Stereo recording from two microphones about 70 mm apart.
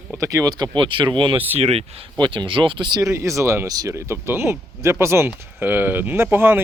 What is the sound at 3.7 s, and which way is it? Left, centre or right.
Speech, right.